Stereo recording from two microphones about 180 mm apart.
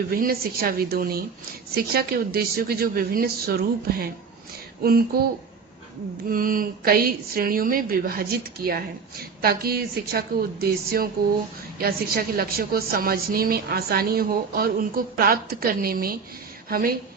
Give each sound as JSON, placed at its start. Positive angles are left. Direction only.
{"t": 0.1, "sound": "speech", "side_deg": -55}
{"t": 6.3, "sound": "speech", "side_deg": -50}